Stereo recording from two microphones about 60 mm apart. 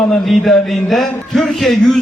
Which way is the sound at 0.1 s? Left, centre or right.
Centre.